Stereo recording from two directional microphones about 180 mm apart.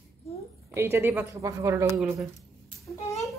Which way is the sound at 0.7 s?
15° right (ahead or behind).